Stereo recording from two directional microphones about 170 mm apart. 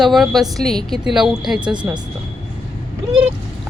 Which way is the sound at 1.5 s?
25° right (ahead or behind).